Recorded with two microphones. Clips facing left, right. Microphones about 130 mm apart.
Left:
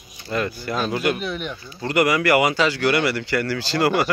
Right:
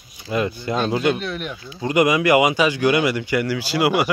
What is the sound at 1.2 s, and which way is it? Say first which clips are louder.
Speech: even; centre (ahead or behind).